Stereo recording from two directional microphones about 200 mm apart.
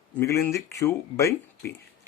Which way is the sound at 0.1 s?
10° left (ahead or behind).